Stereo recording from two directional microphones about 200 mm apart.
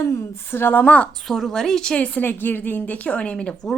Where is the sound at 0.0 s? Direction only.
15° left (ahead or behind).